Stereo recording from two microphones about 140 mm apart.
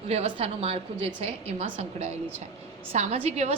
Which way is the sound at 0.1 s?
45° right (ahead or behind).